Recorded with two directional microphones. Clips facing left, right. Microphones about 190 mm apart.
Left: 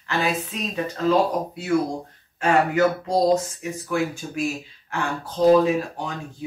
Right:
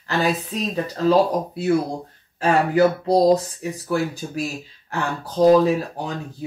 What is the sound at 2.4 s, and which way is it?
Speech, 35° right (ahead or behind).